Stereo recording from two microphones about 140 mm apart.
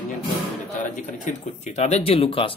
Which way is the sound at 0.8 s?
60° left (ahead or behind).